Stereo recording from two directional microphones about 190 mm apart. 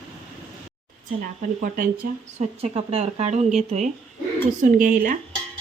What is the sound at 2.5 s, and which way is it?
Speech, 30° right (ahead or behind).